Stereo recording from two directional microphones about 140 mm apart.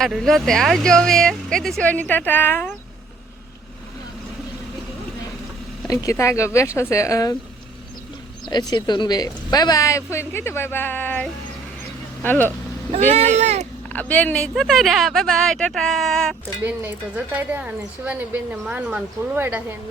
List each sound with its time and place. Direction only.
0.0 s speech: centre (ahead or behind)
5.9 s speech: 25° left (ahead or behind)
8.4 s speech: 30° left (ahead or behind); by 12.5 s 15° left (ahead or behind)
12.9 s speech: 50° right (ahead or behind)
13.9 s speech: 10° left (ahead or behind)
17.3 s a woman's voice: 10° right (ahead or behind)